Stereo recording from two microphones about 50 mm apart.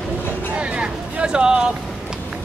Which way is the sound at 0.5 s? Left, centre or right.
Right.